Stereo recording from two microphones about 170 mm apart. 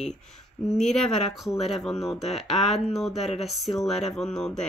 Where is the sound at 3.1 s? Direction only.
40° left (ahead or behind).